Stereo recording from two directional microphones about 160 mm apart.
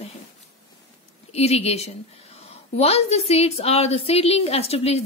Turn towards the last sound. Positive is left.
turn(degrees=40)  # may be behind; listen again after turning